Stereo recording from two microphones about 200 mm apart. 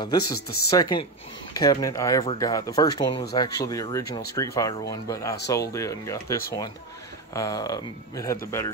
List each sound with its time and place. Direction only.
0.0 s speech: 20° left (ahead or behind)